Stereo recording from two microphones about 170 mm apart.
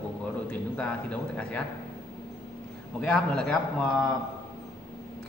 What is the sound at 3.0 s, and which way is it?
A man's voice, 5° left (ahead or behind).